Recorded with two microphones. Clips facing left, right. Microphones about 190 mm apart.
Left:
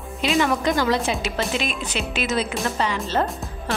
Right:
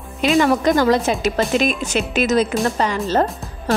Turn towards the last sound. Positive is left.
turn(degrees=-40)  # may be behind; listen again after turning